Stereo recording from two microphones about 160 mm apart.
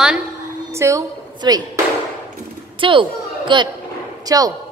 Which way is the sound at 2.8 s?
30° right (ahead or behind).